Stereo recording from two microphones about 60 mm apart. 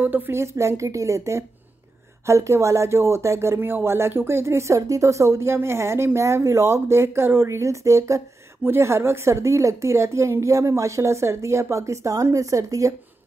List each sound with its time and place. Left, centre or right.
0.3 s a woman's voice: right
3.5 s a woman's voice: right
8.6 s a woman's voice: right